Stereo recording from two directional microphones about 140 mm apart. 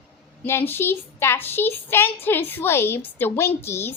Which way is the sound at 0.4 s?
15° left (ahead or behind).